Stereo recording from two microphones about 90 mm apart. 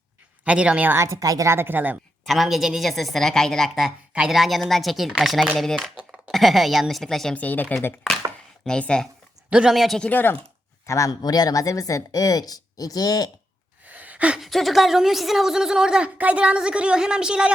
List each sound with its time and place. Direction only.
0.4 s a woman's voice: 10° right (ahead or behind)
0.9 s speech: 30° right (ahead or behind)
1.5 s speech: 25° right (ahead or behind)
2.2 s a woman's voice: centre (ahead or behind)
7.3 s a woman's voice: 20° left (ahead or behind)
8.6 s speech: 10° left (ahead or behind)
9.5 s a woman's voice: 10° right (ahead or behind)
10.0 s a woman's voice: 20° left (ahead or behind)
10.8 s a man's voice: 35° left (ahead or behind)
11.2 s a woman's voice: 45° left (ahead or behind)
13.9 s a sound: 15° right (ahead or behind)
14.3 s a woman's voice: centre (ahead or behind)